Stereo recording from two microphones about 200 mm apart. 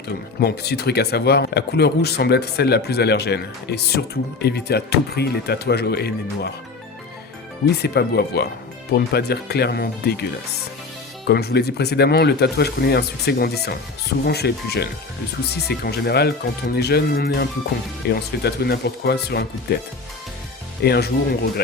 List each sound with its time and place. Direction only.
0.3 s speech: 55° left (ahead or behind)
7.8 s speech: 55° left (ahead or behind)
11.3 s speech: 55° left (ahead or behind)
20.8 s speech: 55° left (ahead or behind)